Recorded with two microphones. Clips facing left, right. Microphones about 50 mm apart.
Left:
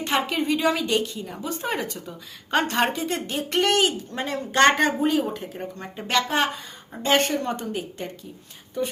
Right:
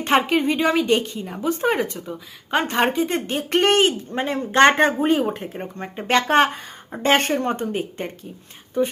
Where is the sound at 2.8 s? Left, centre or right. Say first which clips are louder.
Right 4 dB; right.